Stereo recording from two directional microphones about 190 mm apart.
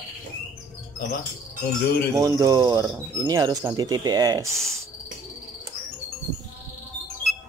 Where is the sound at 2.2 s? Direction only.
20° right (ahead or behind).